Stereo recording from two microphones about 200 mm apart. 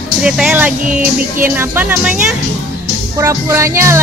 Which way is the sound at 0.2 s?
5° right (ahead or behind).